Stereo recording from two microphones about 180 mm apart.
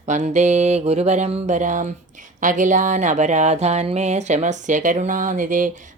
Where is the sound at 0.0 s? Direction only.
40° right (ahead or behind).